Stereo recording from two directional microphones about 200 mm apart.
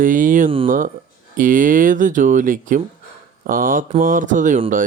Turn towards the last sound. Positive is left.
turn(degrees=-40)  # may be behind; listen again after turning